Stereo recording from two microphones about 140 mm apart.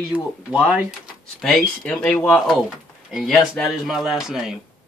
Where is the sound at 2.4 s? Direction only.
5° right (ahead or behind).